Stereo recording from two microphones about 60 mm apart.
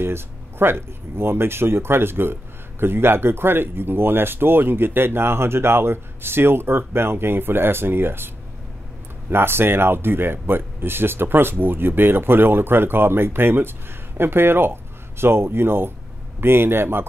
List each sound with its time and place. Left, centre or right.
0.0 s speech: right
9.3 s speech: right